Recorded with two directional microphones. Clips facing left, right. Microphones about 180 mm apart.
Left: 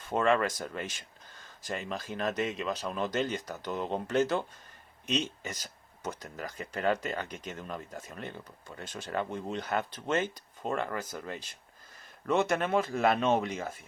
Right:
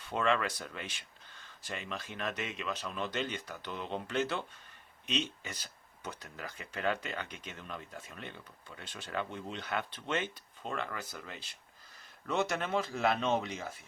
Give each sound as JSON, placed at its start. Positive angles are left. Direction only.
{"t": 0.0, "sound": "speech", "side_deg": 45}